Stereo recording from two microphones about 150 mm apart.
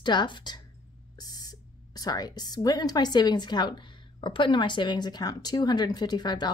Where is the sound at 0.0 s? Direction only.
30° left (ahead or behind).